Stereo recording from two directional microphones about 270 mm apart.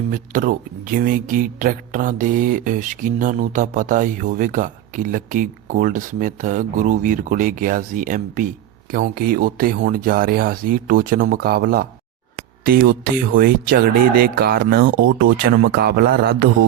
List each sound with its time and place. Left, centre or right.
0.1 s speech: right